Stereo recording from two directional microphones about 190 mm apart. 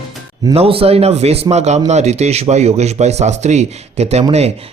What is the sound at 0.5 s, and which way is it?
Speech, 30° right (ahead or behind).